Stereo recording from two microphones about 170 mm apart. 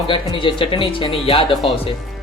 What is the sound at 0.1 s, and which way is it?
Speech, 30° left (ahead or behind).